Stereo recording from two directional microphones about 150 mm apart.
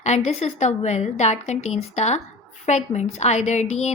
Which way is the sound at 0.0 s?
50° left (ahead or behind).